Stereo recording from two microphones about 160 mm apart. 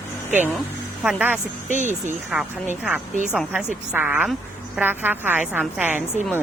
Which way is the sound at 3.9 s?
10° right (ahead or behind).